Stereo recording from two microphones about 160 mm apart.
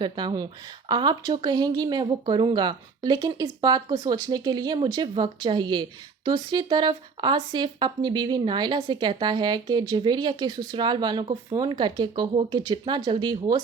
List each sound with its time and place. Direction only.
0.0 s speech: 30° right (ahead or behind)